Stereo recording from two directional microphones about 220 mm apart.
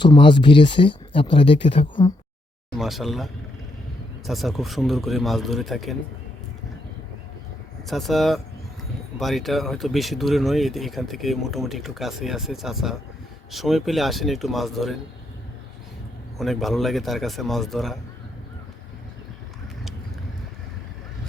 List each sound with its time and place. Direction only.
0.0 s speech: 20° left (ahead or behind)
2.7 s speech: centre (ahead or behind)
4.3 s speech: centre (ahead or behind)
7.9 s speech: centre (ahead or behind)
16.4 s speech: centre (ahead or behind)